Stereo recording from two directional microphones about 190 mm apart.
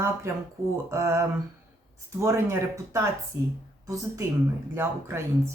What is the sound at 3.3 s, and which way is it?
Speech, 65° right (ahead or behind).